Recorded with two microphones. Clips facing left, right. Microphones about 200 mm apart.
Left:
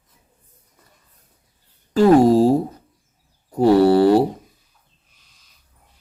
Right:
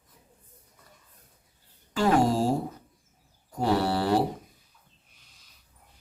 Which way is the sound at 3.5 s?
40° left (ahead or behind).